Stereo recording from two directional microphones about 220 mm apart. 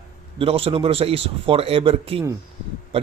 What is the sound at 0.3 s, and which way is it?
Speech, 25° right (ahead or behind).